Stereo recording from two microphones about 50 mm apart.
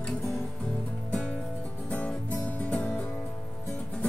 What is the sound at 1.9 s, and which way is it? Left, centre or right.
Music, left.